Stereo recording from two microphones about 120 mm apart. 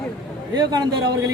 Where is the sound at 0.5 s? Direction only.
35° right (ahead or behind).